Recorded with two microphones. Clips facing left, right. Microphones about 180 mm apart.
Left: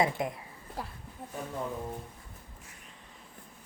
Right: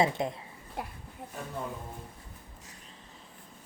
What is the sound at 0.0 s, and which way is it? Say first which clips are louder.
Speech: right 1 dB; 25° right (ahead or behind).